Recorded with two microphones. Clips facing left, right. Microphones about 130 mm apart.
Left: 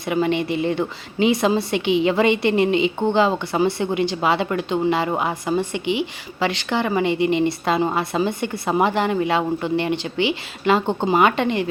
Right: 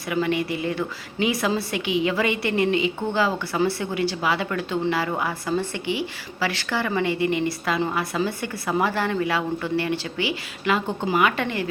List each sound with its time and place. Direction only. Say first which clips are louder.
0.0 s a woman's voice: left 3 dB; 25° left (ahead or behind)